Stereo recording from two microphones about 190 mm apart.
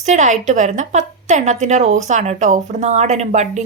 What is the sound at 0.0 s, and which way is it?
Speech, 40° right (ahead or behind).